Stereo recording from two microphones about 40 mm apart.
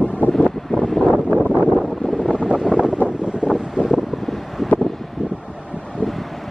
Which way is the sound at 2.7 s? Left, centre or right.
Right.